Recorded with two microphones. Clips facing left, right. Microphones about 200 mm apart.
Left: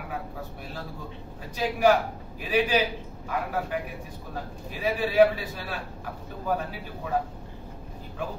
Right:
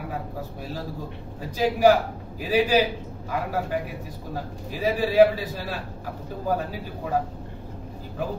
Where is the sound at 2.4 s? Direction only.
40° right (ahead or behind).